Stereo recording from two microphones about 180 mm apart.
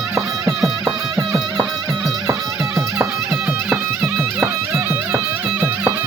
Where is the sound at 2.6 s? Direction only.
15° right (ahead or behind).